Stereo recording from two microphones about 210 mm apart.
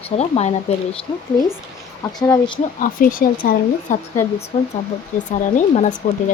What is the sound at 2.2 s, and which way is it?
Speech, 20° left (ahead or behind).